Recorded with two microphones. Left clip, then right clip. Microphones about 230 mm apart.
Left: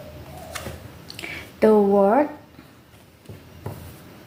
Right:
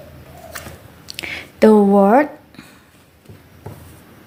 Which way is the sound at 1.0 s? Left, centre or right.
Right.